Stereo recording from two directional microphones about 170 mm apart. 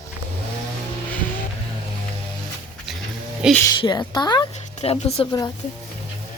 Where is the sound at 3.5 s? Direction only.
15° left (ahead or behind).